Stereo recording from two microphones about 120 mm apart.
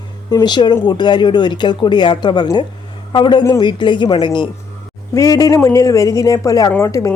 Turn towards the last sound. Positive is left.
turn(degrees=25)  # may be behind; listen again after turning